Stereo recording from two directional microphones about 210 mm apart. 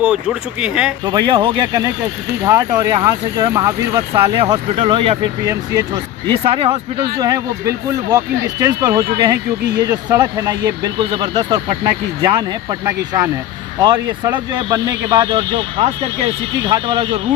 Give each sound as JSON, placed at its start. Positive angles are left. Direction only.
{"t": 0.0, "sound": "speech", "side_deg": -5}
{"t": 1.0, "sound": "speech", "side_deg": -20}